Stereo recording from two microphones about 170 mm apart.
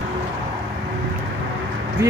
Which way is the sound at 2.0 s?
20° right (ahead or behind).